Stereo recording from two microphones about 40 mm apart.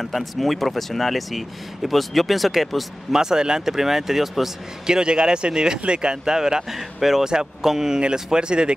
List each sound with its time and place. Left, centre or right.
0.0 s speech: centre
3.2 s speech: centre
4.8 s speech: centre
7.0 s speech: centre; by 8.7 s right